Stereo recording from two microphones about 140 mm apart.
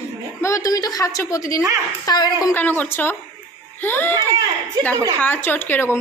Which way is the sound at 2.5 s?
10° left (ahead or behind).